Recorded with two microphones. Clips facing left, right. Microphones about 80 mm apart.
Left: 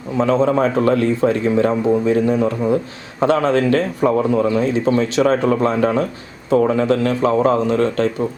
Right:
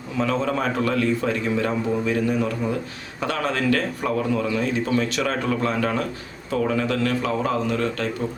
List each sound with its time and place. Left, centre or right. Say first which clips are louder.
0.2 s a man's voice: left 8 dB; left